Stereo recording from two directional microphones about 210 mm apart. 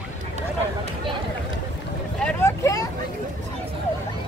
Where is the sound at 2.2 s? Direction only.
15° left (ahead or behind).